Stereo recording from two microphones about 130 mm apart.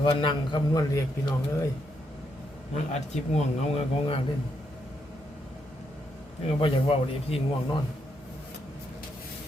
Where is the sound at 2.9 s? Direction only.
55° left (ahead or behind).